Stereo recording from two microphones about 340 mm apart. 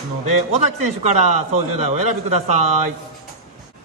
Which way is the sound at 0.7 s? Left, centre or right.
Right.